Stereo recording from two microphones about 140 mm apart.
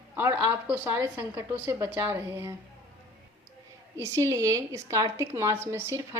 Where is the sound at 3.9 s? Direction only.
20° right (ahead or behind).